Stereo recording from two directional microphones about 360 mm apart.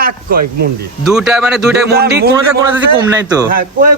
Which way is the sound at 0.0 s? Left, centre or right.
Right.